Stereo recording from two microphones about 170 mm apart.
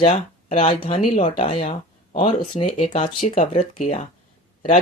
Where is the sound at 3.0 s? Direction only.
45° left (ahead or behind).